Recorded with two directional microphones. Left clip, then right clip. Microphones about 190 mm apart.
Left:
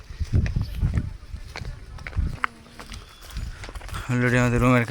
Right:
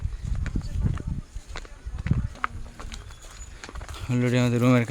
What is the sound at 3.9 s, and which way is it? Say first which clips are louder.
Speech: left 3 dB; 10° right (ahead or behind).